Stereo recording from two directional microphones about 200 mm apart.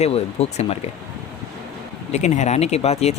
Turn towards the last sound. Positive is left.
turn(degrees=30)  # may be behind; listen again after turning